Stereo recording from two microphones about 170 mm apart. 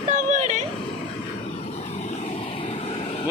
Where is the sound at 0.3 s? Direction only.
45° right (ahead or behind).